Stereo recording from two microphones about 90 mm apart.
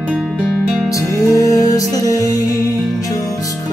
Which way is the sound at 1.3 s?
40° left (ahead or behind).